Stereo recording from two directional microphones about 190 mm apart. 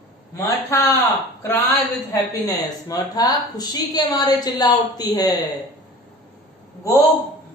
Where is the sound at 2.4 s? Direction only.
20° left (ahead or behind).